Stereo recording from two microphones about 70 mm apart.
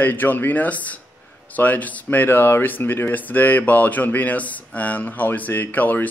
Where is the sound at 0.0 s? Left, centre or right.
Left.